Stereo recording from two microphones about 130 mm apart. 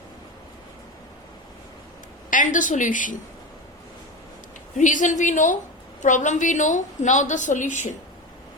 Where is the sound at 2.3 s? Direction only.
80° left.